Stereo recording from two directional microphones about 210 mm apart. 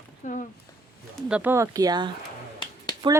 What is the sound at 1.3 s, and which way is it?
Speech, 10° right (ahead or behind).